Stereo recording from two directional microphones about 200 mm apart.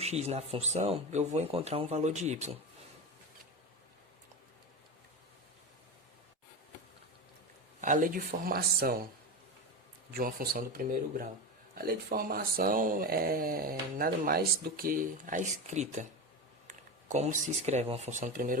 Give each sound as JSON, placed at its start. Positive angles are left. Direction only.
{"t": 0.0, "sound": "speech", "side_deg": -30}
{"t": 7.8, "sound": "speech", "side_deg": -40}
{"t": 10.2, "sound": "speech", "side_deg": -45}